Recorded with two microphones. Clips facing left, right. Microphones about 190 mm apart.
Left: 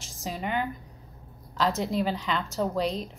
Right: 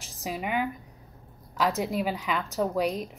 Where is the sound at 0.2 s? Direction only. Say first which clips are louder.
Right 1 dB; 10° right (ahead or behind).